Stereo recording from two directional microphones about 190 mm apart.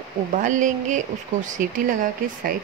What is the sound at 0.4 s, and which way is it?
Speech, 40° right (ahead or behind).